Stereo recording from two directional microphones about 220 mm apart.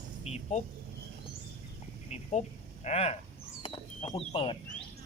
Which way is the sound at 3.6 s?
25° left (ahead or behind).